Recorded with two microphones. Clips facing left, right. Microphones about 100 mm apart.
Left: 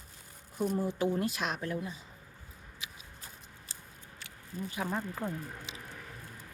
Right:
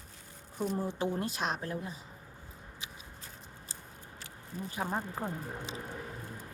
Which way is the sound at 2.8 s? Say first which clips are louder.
Even; 30° right (ahead or behind).